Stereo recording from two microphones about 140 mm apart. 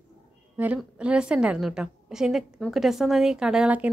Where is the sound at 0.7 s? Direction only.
5° right (ahead or behind).